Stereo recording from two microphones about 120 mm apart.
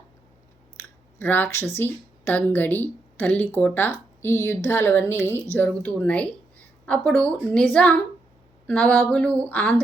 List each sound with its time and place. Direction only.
1.2 s speech: 15° left (ahead or behind)